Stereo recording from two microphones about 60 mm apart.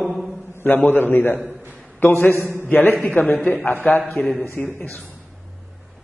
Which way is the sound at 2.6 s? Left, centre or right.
Left.